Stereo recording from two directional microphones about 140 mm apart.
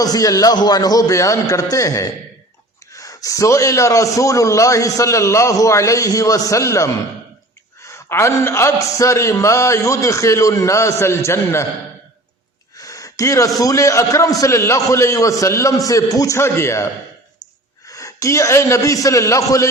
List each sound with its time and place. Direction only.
0.0 s a man's voice: 25° left (ahead or behind)
12.7 s gasp: 25° left (ahead or behind)
13.6 s a man's voice: 25° left (ahead or behind)